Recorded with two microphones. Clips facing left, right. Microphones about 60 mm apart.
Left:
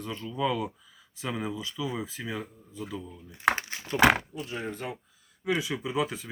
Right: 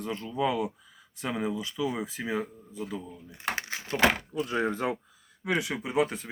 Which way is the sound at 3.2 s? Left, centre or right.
Centre.